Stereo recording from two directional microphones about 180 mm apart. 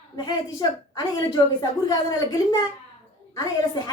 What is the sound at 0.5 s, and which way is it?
A woman's voice, 25° left (ahead or behind).